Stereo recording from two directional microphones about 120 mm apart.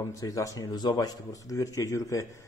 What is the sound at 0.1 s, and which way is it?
Speech, 30° left (ahead or behind).